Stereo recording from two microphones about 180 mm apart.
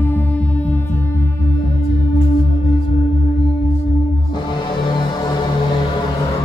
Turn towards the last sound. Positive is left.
turn(degrees=25)  # may be behind; listen again after turning